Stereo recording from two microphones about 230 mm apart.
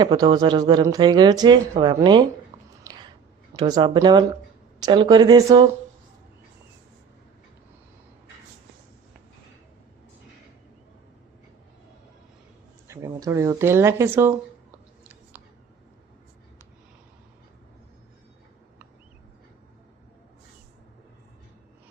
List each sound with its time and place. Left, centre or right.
0.0 s speech: centre
2.5 s a sound: centre
3.5 s speech: centre
12.9 s speech: centre
15.0 s whispering: centre